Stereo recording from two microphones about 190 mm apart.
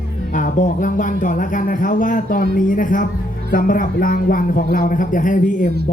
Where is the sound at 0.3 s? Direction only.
45° left (ahead or behind).